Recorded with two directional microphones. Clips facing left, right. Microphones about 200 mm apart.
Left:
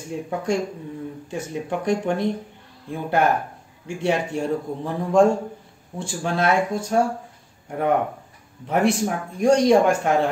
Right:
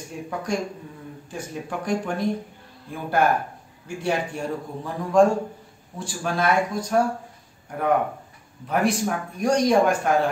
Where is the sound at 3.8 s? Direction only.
25° left (ahead or behind).